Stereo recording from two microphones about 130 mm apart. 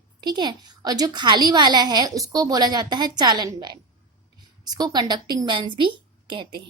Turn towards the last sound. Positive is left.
turn(degrees=-40)  # may be behind; listen again after turning